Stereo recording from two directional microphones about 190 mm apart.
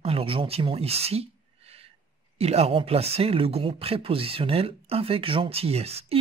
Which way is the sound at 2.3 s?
35° right (ahead or behind).